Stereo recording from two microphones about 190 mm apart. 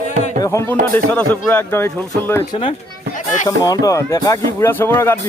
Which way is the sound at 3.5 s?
20° left (ahead or behind).